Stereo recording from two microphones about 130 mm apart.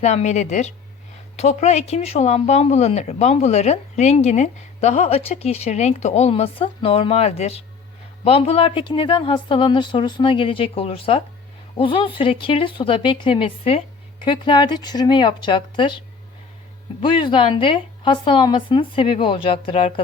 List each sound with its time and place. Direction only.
0.0 s speech: 60° left (ahead or behind); by 19.9 s 45° left (ahead or behind)